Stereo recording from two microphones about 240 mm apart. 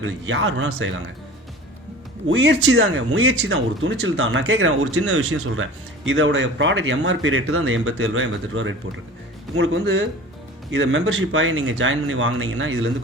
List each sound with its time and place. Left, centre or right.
0.0 s speech: right
2.2 s speech: right
6.1 s speech: right